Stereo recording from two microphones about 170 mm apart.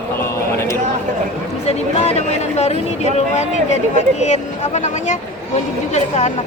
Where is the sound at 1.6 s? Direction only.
40° left (ahead or behind).